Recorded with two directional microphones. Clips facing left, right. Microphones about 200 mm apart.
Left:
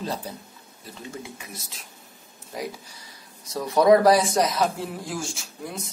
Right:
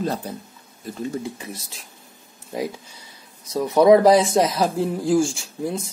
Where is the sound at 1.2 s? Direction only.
35° right (ahead or behind).